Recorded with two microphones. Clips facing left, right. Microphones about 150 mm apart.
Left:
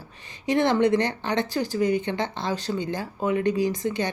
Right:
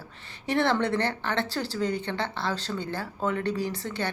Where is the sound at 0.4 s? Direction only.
15° left (ahead or behind).